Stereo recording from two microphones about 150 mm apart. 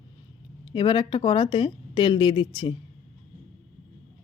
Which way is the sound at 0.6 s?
35° left (ahead or behind).